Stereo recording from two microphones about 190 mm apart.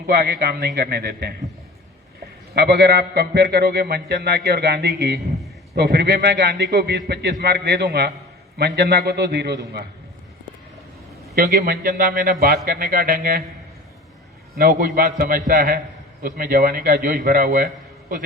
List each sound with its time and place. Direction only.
0.1 s a man's voice: 55° right (ahead or behind)
2.6 s a man's voice: 60° right (ahead or behind)
11.3 s a man's voice: 50° right (ahead or behind)
14.6 s a man's voice: 50° right (ahead or behind)